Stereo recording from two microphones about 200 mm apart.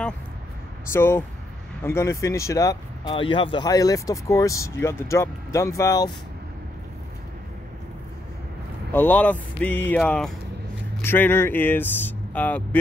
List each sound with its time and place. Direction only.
0.9 s speech: 10° left (ahead or behind)
8.9 s speech: 10° left (ahead or behind)